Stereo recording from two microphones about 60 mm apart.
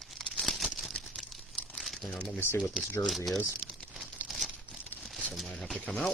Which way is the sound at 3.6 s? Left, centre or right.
Centre.